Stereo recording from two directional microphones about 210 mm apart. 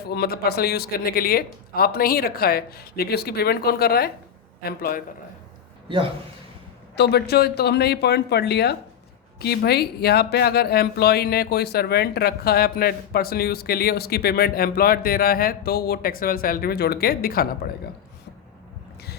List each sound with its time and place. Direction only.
0.0 s speech: 50° left (ahead or behind)
6.9 s speech: 50° left (ahead or behind)